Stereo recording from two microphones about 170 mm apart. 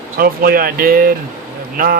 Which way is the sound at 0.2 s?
60° right (ahead or behind).